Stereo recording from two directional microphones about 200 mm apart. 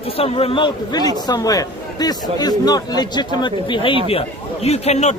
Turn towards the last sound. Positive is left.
turn(degrees=35)  # may be behind; listen again after turning